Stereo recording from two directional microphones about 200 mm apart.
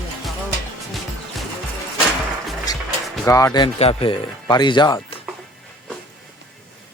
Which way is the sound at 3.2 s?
15° left (ahead or behind).